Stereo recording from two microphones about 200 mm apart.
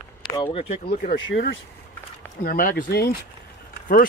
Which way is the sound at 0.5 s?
30° left (ahead or behind).